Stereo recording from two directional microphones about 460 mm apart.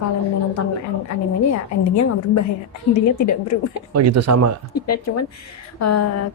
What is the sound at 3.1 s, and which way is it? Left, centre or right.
Speech, left.